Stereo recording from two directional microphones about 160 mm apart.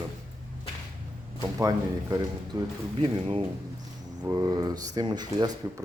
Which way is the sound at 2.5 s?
30° right (ahead or behind).